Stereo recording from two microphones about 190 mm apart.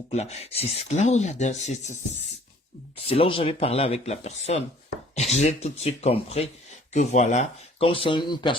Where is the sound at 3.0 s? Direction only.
30° left (ahead or behind).